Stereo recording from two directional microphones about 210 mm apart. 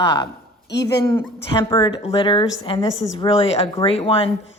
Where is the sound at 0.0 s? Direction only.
20° left (ahead or behind).